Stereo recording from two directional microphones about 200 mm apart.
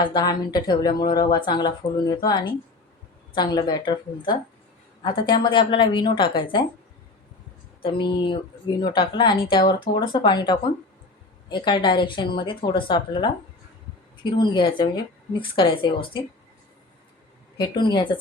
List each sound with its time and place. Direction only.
0.0 s speech: 20° left (ahead or behind)
7.8 s speech: 25° left (ahead or behind)
14.3 s speech: 25° left (ahead or behind)
17.6 s speech: 20° left (ahead or behind)